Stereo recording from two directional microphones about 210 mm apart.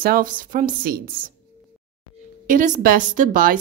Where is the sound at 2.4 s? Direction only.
40° right (ahead or behind).